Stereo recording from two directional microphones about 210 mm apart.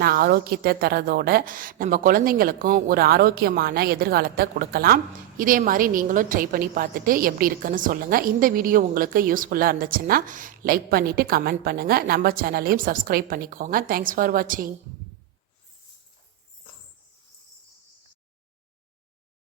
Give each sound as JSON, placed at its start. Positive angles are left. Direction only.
{"t": 0.0, "sound": "a woman's voice", "side_deg": -45}